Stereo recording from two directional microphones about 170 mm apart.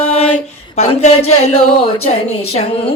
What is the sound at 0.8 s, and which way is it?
Speech, 40° left (ahead or behind).